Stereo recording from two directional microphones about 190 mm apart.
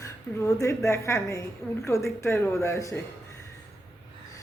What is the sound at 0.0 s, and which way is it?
Speech, 15° left (ahead or behind).